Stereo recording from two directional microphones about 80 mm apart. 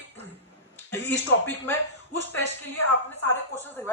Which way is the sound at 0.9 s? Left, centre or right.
Left.